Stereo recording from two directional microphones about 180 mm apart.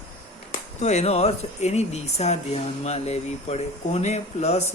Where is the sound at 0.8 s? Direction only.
40° left (ahead or behind).